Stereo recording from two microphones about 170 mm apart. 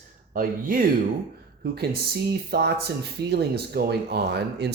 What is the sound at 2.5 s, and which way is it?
Speech, 70° right (ahead or behind).